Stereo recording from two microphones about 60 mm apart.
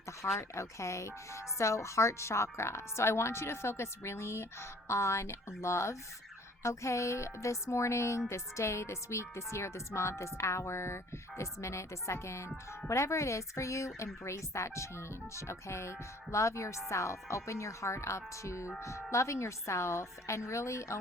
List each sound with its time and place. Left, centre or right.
0.3 s speech: left